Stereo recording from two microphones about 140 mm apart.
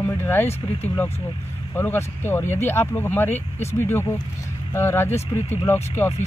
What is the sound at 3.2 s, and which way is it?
Speech, 55° left (ahead or behind).